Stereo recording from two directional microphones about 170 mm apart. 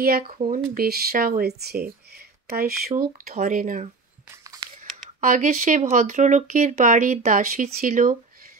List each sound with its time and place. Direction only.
0.4 s speech: 60° right (ahead or behind)
3.3 s speech: 50° right (ahead or behind)
5.2 s speech: 50° right (ahead or behind)